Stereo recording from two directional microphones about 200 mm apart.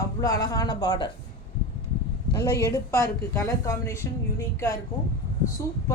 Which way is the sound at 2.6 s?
15° left (ahead or behind).